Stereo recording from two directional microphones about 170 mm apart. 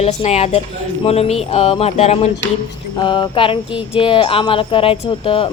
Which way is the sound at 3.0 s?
25° left (ahead or behind).